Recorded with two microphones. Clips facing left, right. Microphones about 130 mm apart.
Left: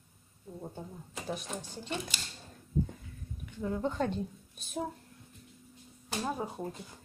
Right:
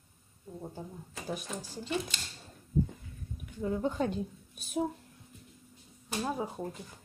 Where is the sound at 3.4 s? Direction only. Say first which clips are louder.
Right 1 dB; 5° right (ahead or behind).